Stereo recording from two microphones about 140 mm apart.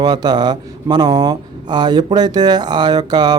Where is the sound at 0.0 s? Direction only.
30° right (ahead or behind).